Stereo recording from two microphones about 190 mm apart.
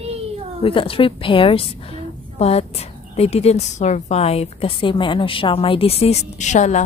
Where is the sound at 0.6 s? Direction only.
30° left (ahead or behind).